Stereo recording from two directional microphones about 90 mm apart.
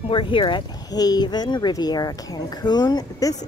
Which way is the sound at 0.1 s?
70° left (ahead or behind).